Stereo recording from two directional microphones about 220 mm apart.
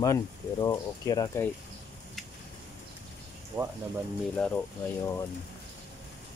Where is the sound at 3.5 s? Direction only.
10° right (ahead or behind).